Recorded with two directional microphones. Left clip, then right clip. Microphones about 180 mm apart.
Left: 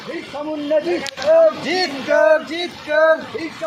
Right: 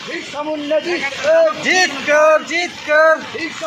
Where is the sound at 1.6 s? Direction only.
20° right (ahead or behind).